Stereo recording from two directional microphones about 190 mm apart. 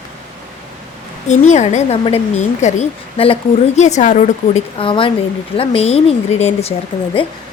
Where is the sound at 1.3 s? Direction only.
40° left (ahead or behind).